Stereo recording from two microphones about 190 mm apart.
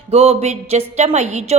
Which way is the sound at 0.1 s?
30° right (ahead or behind).